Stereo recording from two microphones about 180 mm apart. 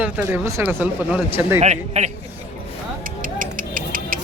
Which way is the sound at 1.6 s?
40° right (ahead or behind).